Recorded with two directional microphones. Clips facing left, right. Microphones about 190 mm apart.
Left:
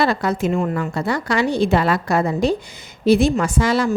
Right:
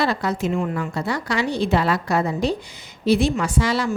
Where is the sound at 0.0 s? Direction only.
50° left (ahead or behind).